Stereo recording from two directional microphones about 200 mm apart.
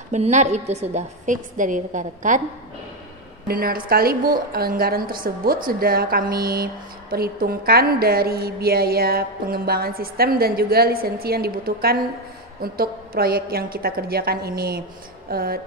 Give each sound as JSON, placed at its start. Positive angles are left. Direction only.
{"t": 0.1, "sound": "a woman's voice", "side_deg": -35}
{"t": 3.4, "sound": "a woman's voice", "side_deg": -50}